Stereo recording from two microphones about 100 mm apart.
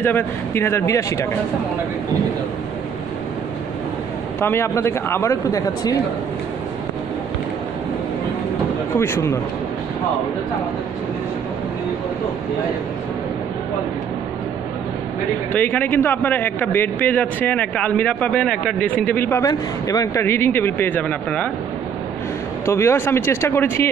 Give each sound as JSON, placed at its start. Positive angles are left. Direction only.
{"t": 0.0, "sound": "speech", "side_deg": 25}
{"t": 4.4, "sound": "speech", "side_deg": 25}
{"t": 8.9, "sound": "speech", "side_deg": 25}
{"t": 15.5, "sound": "a man's voice", "side_deg": 20}
{"t": 19.4, "sound": "speech", "side_deg": 35}
{"t": 22.7, "sound": "speech", "side_deg": 25}